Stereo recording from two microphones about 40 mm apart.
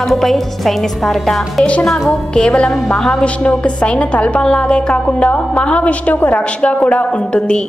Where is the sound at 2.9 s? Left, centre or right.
Centre.